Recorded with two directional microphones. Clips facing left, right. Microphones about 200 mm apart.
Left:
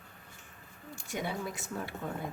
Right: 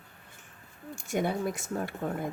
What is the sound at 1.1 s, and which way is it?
Speech, 50° right (ahead or behind).